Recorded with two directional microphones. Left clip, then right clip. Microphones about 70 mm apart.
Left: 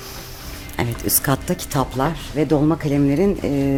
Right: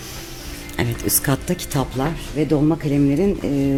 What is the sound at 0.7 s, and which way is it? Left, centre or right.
Speech, centre.